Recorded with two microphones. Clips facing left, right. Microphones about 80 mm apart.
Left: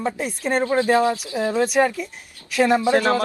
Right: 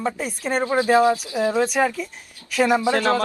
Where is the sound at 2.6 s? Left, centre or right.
Centre.